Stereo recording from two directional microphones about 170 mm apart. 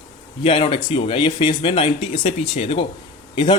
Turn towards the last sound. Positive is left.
turn(degrees=25)  # may be behind; listen again after turning